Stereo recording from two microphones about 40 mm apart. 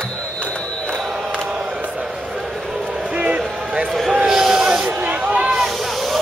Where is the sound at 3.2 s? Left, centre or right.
Right.